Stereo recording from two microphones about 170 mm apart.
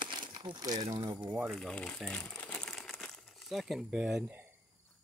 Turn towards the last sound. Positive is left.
turn(degrees=-5)  # may be behind; listen again after turning